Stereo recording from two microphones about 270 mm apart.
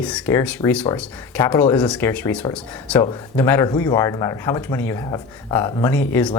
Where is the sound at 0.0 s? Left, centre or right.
Centre.